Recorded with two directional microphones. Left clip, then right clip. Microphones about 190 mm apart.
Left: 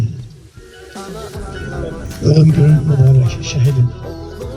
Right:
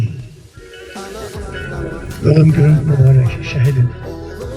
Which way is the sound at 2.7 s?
Centre (ahead or behind).